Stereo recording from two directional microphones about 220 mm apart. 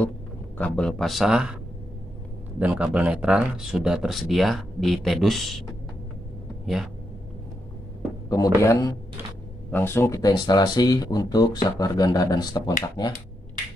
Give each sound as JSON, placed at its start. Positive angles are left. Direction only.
{"t": 0.6, "sound": "speech", "side_deg": 5}
{"t": 2.6, "sound": "speech", "side_deg": -5}
{"t": 6.6, "sound": "speech", "side_deg": 0}
{"t": 8.3, "sound": "speech", "side_deg": 15}